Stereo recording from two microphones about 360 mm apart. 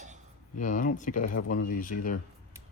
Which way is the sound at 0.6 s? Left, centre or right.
Left.